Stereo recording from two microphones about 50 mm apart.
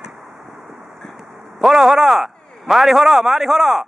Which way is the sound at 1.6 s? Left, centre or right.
Centre.